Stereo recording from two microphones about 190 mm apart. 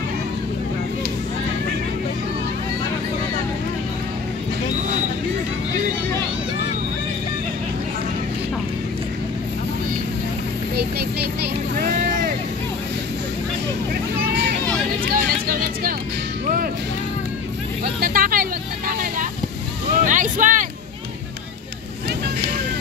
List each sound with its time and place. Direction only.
11.8 s vehicle: 45° right (ahead or behind)
15.0 s a sound: 50° right (ahead or behind)
17.8 s music: 50° right (ahead or behind)